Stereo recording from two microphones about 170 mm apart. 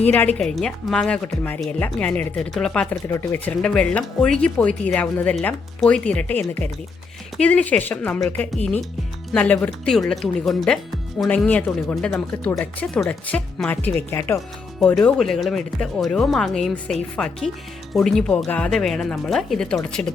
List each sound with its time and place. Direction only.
0.0 s speech: 10° left (ahead or behind)
2.9 s speech: 15° left (ahead or behind)